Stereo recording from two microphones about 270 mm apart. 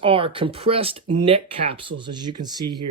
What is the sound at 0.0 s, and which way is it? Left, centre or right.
Speech, centre.